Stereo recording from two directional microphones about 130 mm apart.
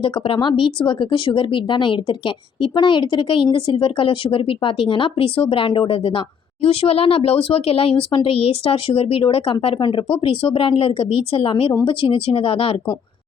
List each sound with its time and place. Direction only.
0.0 s speech: 40° left (ahead or behind)